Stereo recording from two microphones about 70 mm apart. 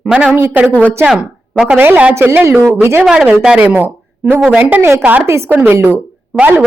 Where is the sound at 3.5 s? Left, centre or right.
Right.